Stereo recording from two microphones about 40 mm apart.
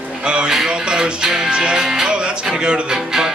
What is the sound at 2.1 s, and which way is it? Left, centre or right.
Music, right.